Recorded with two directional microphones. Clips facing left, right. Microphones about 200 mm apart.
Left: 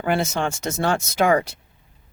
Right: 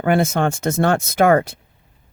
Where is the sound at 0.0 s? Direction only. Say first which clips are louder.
Right 5 dB; 55° right (ahead or behind).